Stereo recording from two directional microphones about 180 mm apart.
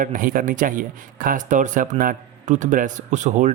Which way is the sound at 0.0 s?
50° right (ahead or behind).